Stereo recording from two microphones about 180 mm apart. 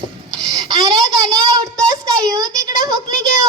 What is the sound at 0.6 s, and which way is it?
Child singing, 20° right (ahead or behind).